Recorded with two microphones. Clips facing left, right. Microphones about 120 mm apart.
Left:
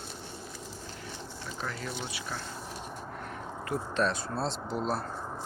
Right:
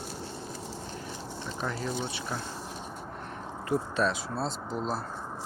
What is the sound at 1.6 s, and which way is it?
Speech, 20° right (ahead or behind).